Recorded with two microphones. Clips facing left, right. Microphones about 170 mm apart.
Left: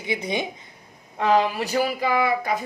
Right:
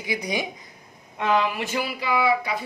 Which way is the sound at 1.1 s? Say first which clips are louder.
Left 3 dB; 35° left (ahead or behind).